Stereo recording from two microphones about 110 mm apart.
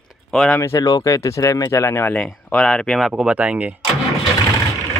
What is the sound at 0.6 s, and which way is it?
Speech, 25° left (ahead or behind).